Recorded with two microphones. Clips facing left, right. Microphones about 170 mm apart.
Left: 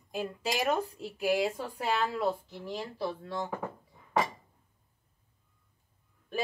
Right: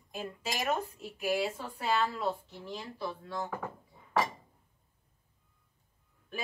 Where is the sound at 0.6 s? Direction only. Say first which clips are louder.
Left 1 dB; 35° left (ahead or behind).